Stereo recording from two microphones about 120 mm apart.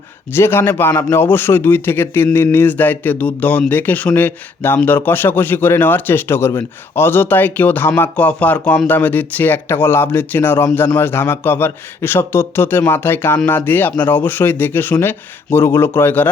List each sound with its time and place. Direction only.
0.3 s a man's voice: 20° left (ahead or behind)